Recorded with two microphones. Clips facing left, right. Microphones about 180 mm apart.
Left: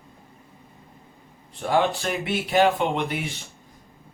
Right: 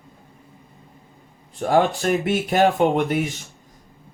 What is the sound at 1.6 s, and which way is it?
Speech, 45° right (ahead or behind).